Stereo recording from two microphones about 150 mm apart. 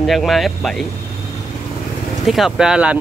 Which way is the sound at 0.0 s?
Centre (ahead or behind).